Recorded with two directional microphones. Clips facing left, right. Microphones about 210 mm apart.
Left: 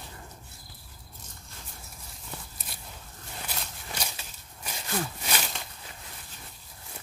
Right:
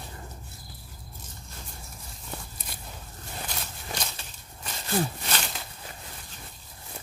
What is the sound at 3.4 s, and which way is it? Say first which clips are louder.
Walk: even; 10° left (ahead or behind).